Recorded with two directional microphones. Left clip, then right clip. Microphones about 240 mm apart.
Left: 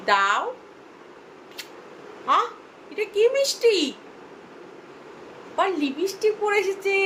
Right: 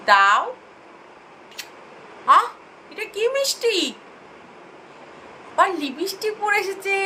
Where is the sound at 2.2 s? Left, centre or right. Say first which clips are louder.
Right 6 dB; centre.